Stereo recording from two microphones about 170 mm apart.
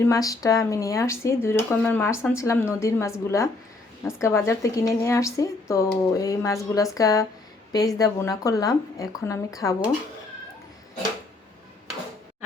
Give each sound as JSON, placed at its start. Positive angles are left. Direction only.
{"t": 0.0, "sound": "speech", "side_deg": 20}